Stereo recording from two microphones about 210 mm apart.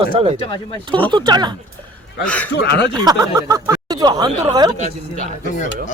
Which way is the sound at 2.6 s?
55° left (ahead or behind).